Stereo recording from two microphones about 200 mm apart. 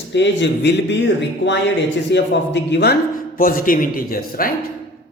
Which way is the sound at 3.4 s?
45° left (ahead or behind).